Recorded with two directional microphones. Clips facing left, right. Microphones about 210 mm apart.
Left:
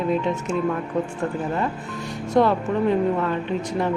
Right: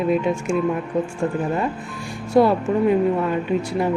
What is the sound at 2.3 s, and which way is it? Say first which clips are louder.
Speech: right 3 dB; 10° right (ahead or behind).